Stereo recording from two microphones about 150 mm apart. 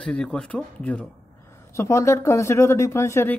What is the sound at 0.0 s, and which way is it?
Speech, 5° left (ahead or behind).